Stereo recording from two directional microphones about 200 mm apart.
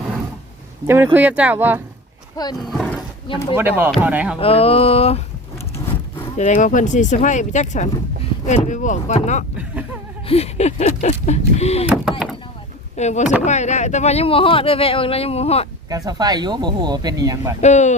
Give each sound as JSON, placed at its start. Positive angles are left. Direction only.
{"t": 0.9, "sound": "speech", "side_deg": -10}
{"t": 2.3, "sound": "speech", "side_deg": 20}
{"t": 2.6, "sound": "roaring cats", "side_deg": 5}
{"t": 3.5, "sound": "speech", "side_deg": -10}
{"t": 4.4, "sound": "a sound", "side_deg": 30}
{"t": 6.3, "sound": "speech", "side_deg": 35}
{"t": 13.0, "sound": "speech", "side_deg": 35}
{"t": 15.9, "sound": "speech", "side_deg": -20}
{"t": 17.6, "sound": "speech", "side_deg": 35}